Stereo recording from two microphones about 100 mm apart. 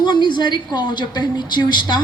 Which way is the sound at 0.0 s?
50° left (ahead or behind).